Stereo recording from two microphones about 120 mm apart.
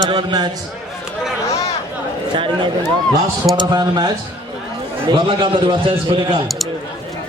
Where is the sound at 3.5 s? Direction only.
35° right (ahead or behind).